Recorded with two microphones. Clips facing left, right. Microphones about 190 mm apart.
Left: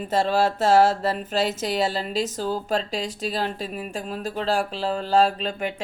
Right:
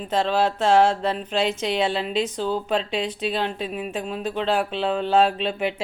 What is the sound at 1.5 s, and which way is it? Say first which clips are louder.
Speech: right 1 dB; 45° left (ahead or behind).